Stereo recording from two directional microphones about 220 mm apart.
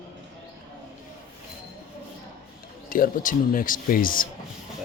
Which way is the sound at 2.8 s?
40° left (ahead or behind).